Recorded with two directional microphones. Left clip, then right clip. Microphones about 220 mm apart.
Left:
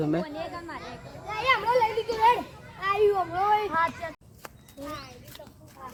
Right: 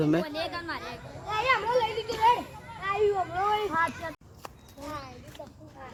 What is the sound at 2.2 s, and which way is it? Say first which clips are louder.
Children playing: left 1 dB; 50° left (ahead or behind).